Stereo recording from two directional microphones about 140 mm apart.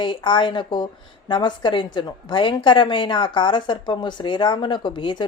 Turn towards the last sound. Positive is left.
turn(degrees=35)  # may be behind; listen again after turning